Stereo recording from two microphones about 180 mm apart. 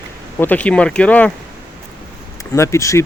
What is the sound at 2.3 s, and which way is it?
Speech, 15° left (ahead or behind).